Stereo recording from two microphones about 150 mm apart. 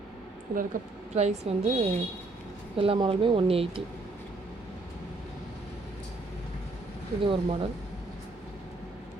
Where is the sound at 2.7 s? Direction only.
40° right (ahead or behind).